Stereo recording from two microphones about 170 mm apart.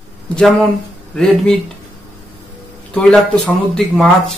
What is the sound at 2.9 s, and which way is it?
Speech, 5° left (ahead or behind).